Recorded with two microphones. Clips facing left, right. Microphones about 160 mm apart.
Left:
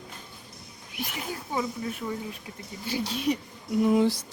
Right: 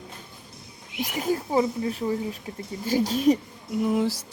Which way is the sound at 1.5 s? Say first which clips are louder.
Right 4 dB; 30° right (ahead or behind).